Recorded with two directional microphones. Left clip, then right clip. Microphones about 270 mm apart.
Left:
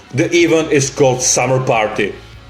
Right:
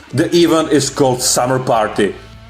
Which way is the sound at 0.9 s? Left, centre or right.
Right.